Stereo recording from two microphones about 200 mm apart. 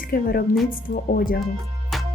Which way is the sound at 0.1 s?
50° left (ahead or behind).